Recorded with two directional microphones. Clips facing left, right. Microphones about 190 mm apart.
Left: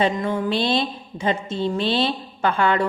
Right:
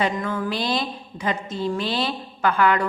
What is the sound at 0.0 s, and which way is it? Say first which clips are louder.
A woman's voice: left 3 dB; 20° left (ahead or behind).